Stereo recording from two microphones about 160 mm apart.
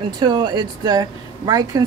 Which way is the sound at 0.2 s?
25° right (ahead or behind).